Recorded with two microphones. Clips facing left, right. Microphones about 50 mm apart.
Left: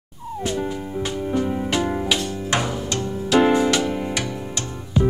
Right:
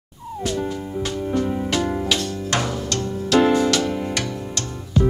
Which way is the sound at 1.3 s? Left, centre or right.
Centre.